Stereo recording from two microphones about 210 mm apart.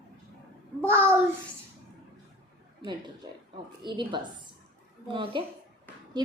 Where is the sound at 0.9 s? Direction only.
10° right (ahead or behind).